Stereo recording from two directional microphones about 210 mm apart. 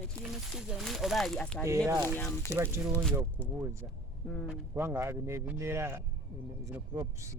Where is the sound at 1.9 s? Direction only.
15° right (ahead or behind).